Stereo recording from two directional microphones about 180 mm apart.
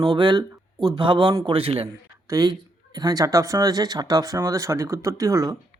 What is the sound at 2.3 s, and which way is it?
Speech, 20° right (ahead or behind).